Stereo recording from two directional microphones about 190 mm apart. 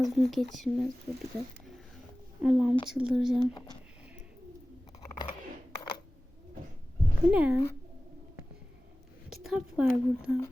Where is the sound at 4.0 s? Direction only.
5° right (ahead or behind).